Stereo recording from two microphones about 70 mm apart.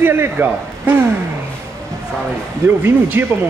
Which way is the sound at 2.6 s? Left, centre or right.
Right.